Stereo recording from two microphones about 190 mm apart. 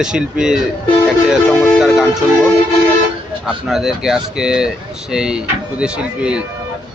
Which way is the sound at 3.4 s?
Centre (ahead or behind).